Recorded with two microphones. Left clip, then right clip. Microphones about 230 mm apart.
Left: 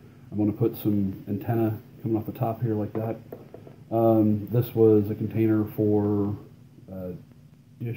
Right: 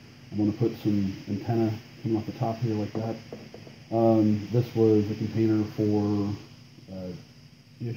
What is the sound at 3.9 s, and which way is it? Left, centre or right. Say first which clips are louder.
Speech: left 1 dB; centre.